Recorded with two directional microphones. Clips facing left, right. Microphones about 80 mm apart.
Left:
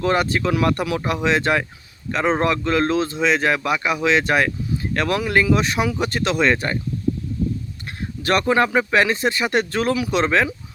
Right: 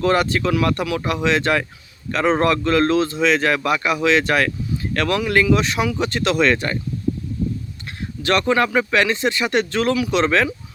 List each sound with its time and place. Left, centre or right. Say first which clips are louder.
0.0 s speech: right 1 dB; centre
2.1 s a man's voice: right 2 dB; centre
2.4 s speech: right 2 dB; centre
8.3 s speech: even; centre
9.7 s speech: right 1 dB; centre
10.0 s speech: right 1 dB; left